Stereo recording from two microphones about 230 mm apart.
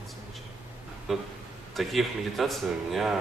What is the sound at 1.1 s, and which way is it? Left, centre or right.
Speech, centre.